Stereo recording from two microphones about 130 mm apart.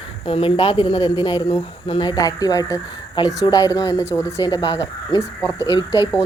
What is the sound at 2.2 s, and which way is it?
Speech, 30° left (ahead or behind).